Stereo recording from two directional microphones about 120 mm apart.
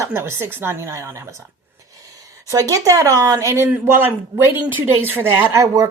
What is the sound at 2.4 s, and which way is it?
Speech, 30° right (ahead or behind).